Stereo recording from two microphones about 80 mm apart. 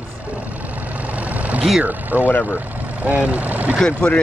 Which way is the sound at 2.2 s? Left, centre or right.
Left.